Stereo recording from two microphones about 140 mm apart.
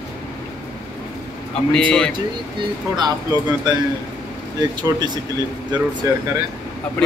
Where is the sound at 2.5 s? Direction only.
30° right (ahead or behind).